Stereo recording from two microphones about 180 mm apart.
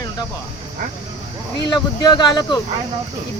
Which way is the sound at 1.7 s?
25° left (ahead or behind).